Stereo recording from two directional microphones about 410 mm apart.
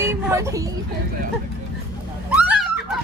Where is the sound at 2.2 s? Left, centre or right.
Centre.